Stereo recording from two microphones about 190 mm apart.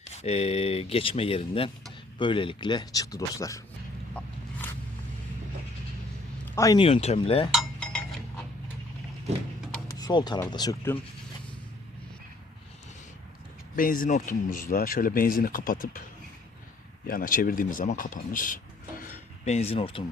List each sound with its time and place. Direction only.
0.1 s speech: 35° left (ahead or behind); by 3.6 s 15° left (ahead or behind)
4.1 s a sound: 5° left (ahead or behind)
6.6 s speech: 20° left (ahead or behind)
6.8 s speech: 30° left (ahead or behind)
7.5 s cutlery: 5° left (ahead or behind)
9.9 s speech: 20° left (ahead or behind)
13.7 s speech: 45° left (ahead or behind)
17.1 s speech: 50° left (ahead or behind)
19.5 s speech: 35° left (ahead or behind)